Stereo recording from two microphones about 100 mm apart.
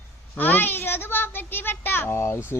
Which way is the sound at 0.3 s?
20° left (ahead or behind).